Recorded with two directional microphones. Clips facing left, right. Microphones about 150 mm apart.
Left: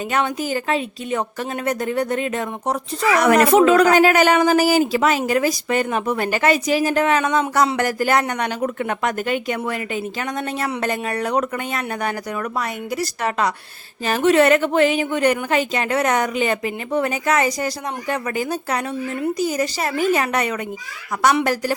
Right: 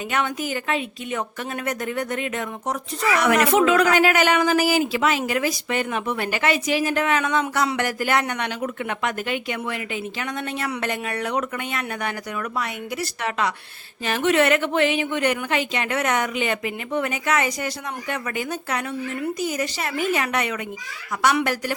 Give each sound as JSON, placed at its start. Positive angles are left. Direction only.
{"t": 0.1, "sound": "a woman's voice", "side_deg": 35}